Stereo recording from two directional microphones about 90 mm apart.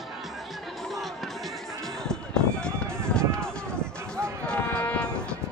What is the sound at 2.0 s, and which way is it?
Run, 10° left (ahead or behind).